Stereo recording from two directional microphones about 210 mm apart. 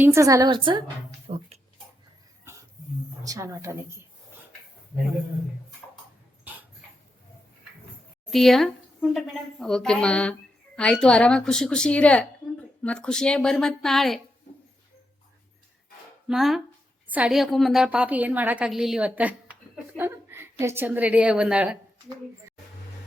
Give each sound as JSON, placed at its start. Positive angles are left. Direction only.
{"t": 0.0, "sound": "a woman's voice", "side_deg": -15}
{"t": 1.3, "sound": "a sound", "side_deg": -30}
{"t": 2.4, "sound": "a sound", "side_deg": -15}
{"t": 3.2, "sound": "a woman's voice", "side_deg": -15}
{"t": 6.4, "sound": "dog", "side_deg": -10}
{"t": 8.3, "sound": "a woman's voice", "side_deg": 0}
{"t": 16.2, "sound": "a woman's voice", "side_deg": 0}